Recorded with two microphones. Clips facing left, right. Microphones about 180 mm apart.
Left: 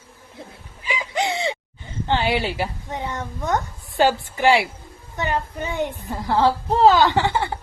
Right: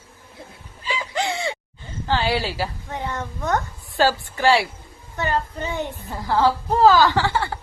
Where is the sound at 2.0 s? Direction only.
20° left (ahead or behind).